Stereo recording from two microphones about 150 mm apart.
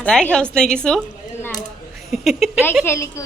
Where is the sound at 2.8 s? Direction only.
20° left (ahead or behind).